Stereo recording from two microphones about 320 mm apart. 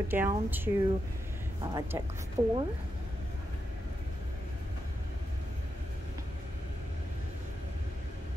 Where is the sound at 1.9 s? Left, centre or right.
Centre.